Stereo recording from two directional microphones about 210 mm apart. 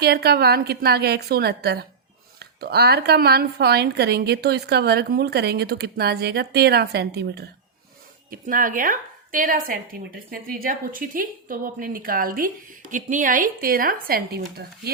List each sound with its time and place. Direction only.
0.0 s a woman's voice: 50° right (ahead or behind)
8.3 s a woman's voice: 40° right (ahead or behind)